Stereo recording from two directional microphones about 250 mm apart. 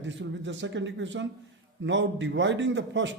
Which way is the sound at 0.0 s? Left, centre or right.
Right.